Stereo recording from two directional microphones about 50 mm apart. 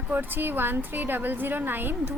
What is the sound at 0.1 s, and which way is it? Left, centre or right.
A woman's voice, right.